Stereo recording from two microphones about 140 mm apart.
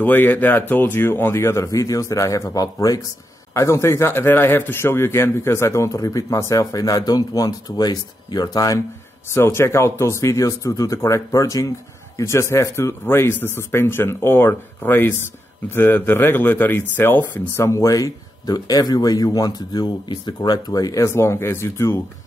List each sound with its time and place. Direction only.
0.0 s speech: 15° left (ahead or behind)